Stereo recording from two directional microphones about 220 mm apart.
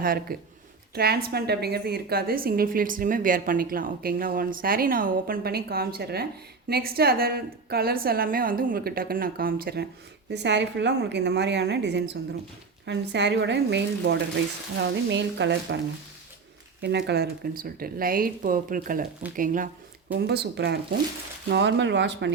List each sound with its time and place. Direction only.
0.0 s a woman's voice: 40° right (ahead or behind)
16.8 s a woman's voice: 50° right (ahead or behind)
20.1 s a woman's voice: 50° right (ahead or behind)